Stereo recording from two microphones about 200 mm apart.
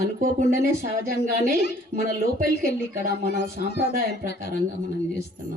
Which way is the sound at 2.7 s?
60° left (ahead or behind).